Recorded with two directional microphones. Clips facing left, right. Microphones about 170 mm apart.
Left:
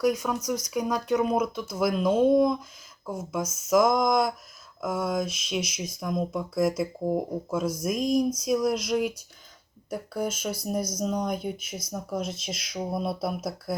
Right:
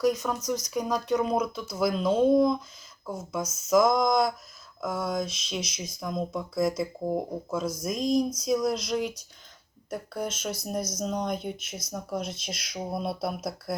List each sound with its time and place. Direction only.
0.0 s speech: 10° left (ahead or behind)
5.6 s speech: 55° left (ahead or behind)
6.0 s speech: 5° left (ahead or behind)
7.9 s speech: 5° left (ahead or behind)